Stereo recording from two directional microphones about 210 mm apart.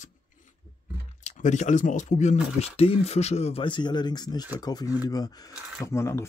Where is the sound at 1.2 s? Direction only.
35° left (ahead or behind).